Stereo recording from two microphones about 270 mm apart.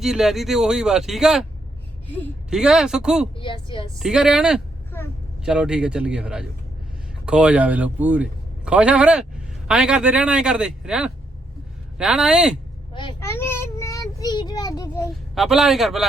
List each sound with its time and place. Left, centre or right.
0.0 s speech: centre
3.3 s a woman's voice: centre
3.9 s speech: centre
4.9 s vehicle: centre
5.4 s a man's voice: centre
12.9 s a child's voice: centre
15.4 s speech: centre